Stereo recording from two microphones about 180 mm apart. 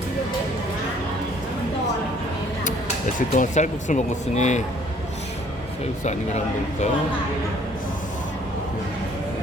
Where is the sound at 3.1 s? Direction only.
45° left (ahead or behind).